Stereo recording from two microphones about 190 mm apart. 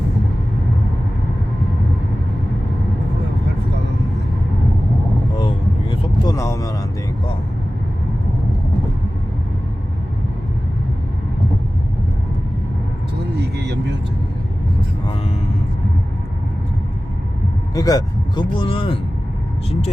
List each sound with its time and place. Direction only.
5.4 s vehicle: 25° left (ahead or behind)
6.3 s vehicle: 15° left (ahead or behind)
17.7 s vehicle: 20° left (ahead or behind)